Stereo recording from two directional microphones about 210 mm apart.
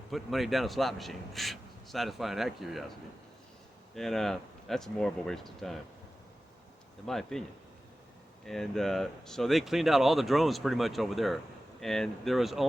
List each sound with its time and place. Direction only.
0.1 s speech: centre (ahead or behind)
3.9 s speech: centre (ahead or behind)
7.0 s speech: centre (ahead or behind)
8.4 s speech: centre (ahead or behind)